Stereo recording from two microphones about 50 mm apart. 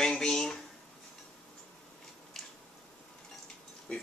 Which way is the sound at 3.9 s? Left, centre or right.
Centre.